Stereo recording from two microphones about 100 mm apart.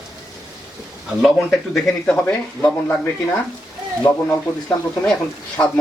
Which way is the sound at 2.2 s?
20° left (ahead or behind).